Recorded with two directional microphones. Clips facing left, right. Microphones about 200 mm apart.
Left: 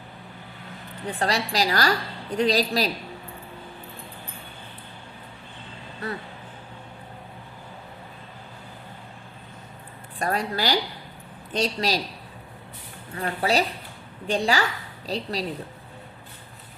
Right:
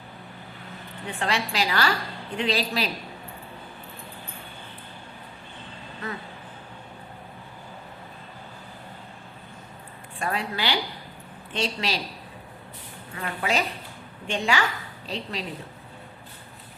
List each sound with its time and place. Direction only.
1.0 s a woman's voice: 40° left (ahead or behind)
10.2 s a woman's voice: 40° left (ahead or behind)
13.1 s a woman's voice: 35° left (ahead or behind)